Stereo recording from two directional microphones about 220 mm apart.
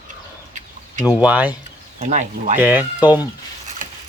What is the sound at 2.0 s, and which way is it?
Speech, 35° right (ahead or behind).